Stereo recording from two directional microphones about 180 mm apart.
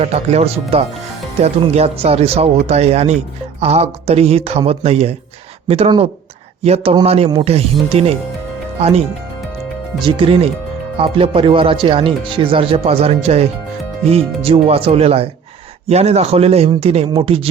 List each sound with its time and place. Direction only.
0.0 s speech: 35° right (ahead or behind)